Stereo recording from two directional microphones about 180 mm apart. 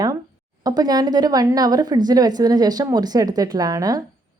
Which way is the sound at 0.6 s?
20° right (ahead or behind).